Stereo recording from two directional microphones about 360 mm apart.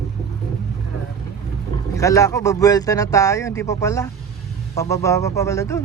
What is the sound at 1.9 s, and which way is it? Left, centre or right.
Speech, centre.